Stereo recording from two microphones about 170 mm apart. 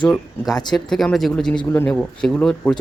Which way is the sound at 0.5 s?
25° left (ahead or behind).